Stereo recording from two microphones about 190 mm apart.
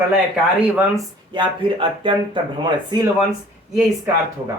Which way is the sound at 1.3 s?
25° right (ahead or behind).